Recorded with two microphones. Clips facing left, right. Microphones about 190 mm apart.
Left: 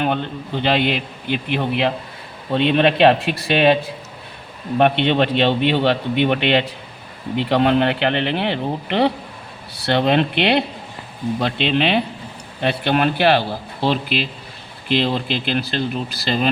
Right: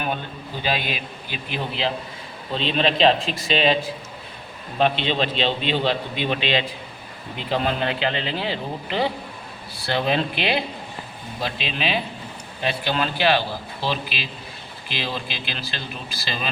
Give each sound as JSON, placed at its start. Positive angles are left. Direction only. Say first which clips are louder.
{"t": 0.6, "sound": "a man's voice", "louder": "left 7 dB", "side_deg": 65}